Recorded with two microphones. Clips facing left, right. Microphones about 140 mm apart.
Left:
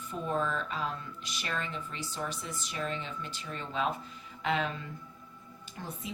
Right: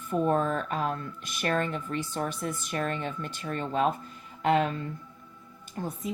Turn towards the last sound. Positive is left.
turn(degrees=-45)  # may be behind; listen again after turning